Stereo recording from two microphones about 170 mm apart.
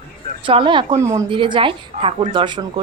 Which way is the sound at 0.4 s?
30° right (ahead or behind).